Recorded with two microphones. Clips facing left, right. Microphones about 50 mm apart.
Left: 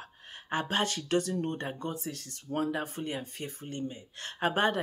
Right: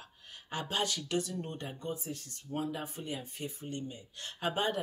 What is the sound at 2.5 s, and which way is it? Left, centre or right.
Speech, left.